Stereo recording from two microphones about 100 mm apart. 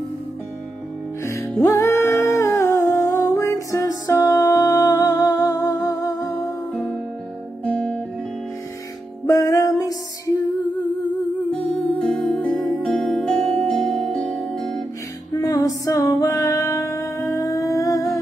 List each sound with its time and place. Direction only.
1.2 s music: 30° left (ahead or behind)
7.6 s music: 10° left (ahead or behind)
9.2 s music: 35° left (ahead or behind)
11.5 s music: 10° left (ahead or behind)
15.5 s music: 35° left (ahead or behind)
16.2 s humming: 30° left (ahead or behind)